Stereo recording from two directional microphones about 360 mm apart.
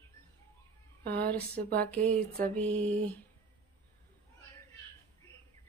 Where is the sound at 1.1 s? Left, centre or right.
Right.